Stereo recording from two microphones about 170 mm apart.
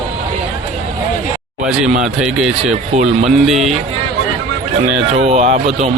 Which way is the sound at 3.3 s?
Centre (ahead or behind).